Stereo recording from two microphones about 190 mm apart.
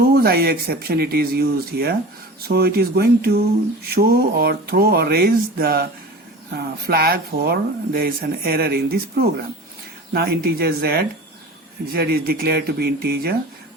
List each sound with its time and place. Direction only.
0.0 s speech: 55° right (ahead or behind)